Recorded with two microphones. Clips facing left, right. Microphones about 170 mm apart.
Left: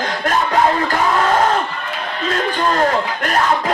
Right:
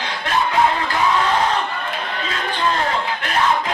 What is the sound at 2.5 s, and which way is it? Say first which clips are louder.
Speech: left 3 dB; 45° left (ahead or behind).